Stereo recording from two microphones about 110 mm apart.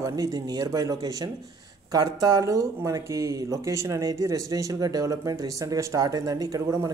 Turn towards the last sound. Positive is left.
turn(degrees=-30)  # may be behind; listen again after turning